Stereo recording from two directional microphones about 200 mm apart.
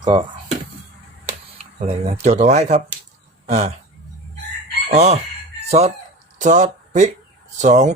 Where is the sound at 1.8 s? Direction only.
30° right (ahead or behind).